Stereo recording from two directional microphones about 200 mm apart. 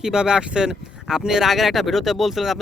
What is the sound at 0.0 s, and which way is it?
Speech, 5° right (ahead or behind).